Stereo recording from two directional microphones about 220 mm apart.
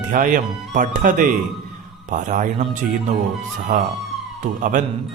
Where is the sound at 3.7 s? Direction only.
35° right (ahead or behind).